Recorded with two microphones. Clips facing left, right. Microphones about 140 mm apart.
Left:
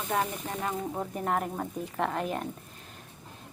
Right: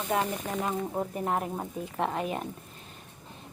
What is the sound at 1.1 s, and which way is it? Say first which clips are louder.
A woman's voice: left 3 dB; 5° right (ahead or behind).